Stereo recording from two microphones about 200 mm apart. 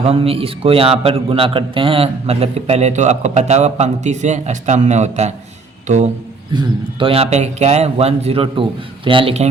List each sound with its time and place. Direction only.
0.0 s a man's voice: 30° right (ahead or behind)
6.5 s a man's voice: 25° right (ahead or behind)